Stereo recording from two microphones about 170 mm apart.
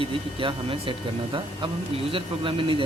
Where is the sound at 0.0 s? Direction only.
30° right (ahead or behind).